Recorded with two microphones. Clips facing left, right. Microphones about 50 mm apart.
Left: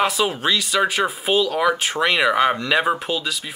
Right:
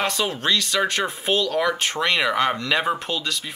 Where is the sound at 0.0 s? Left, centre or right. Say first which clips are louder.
Left 4 dB; centre.